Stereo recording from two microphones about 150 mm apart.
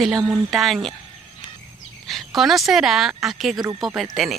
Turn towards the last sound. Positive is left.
turn(degrees=0)  # may be behind; listen again after turning